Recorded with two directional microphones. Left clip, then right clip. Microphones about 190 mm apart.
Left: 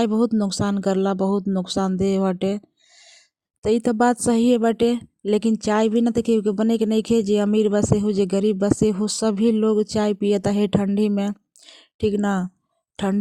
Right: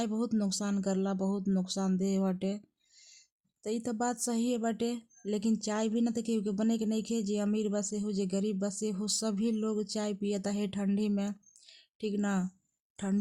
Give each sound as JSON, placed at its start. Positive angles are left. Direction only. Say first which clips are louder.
{"t": 0.0, "sound": "speech", "louder": "left 13 dB", "side_deg": 35}